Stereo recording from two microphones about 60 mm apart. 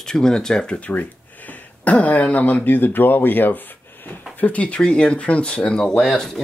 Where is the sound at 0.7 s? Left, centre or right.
Left.